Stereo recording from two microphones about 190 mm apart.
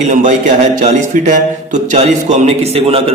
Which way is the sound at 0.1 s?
40° right (ahead or behind).